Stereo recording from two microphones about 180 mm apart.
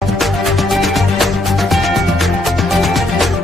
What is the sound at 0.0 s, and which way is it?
Music, centre (ahead or behind).